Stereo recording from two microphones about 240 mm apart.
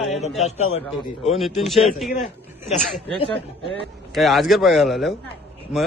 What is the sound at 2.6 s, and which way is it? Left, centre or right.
Speech, left.